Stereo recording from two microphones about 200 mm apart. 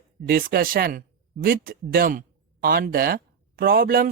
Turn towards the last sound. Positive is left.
turn(degrees=-45)  # may be behind; listen again after turning